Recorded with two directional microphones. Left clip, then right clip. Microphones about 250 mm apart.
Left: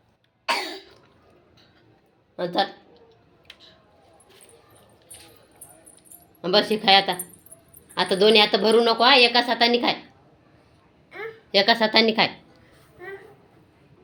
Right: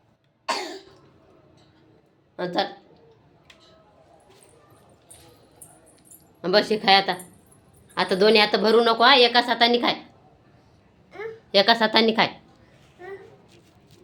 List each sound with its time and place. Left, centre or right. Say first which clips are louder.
0.4 s cough: left 2 dB; centre
2.3 s speech: left 2 dB; centre
6.4 s a woman's voice: even; centre
11.5 s a woman's voice: even; centre